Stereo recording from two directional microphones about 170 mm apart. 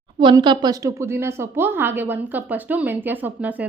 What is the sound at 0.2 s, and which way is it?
A woman's voice, 25° right (ahead or behind).